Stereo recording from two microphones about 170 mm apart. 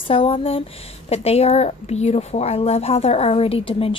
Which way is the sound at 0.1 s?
35° left (ahead or behind).